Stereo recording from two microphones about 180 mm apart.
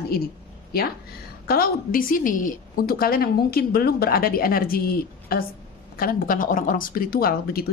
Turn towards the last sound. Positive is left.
turn(degrees=55)  # may be behind; listen again after turning